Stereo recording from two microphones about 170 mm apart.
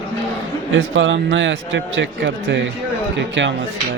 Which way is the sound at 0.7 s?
90° right.